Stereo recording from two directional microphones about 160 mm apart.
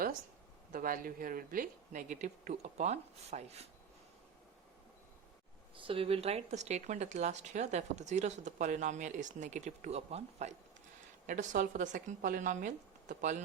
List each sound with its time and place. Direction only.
0.7 s speech: 60° right (ahead or behind); by 3.7 s 40° right (ahead or behind)
5.7 s speech: 35° right (ahead or behind)
11.3 s speech: 55° right (ahead or behind)